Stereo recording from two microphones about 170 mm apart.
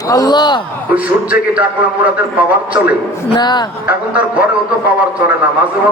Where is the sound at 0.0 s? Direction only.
20° left (ahead or behind).